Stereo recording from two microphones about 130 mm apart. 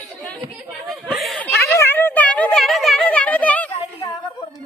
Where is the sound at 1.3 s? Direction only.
5° left (ahead or behind).